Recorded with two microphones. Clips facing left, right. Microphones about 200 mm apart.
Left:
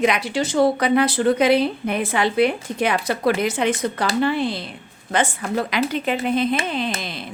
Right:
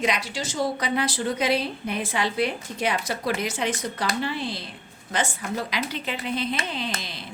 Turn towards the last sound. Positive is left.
turn(degrees=55)  # may be behind; listen again after turning